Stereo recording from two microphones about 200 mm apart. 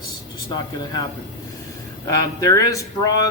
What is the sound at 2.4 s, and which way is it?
Speech, 15° left (ahead or behind).